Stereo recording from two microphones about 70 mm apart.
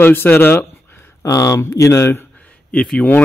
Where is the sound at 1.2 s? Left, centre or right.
Left.